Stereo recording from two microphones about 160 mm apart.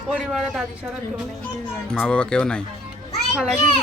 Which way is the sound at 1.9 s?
5° left (ahead or behind).